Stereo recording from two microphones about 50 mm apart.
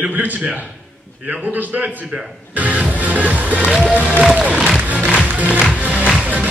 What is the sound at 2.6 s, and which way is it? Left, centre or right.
Music, right.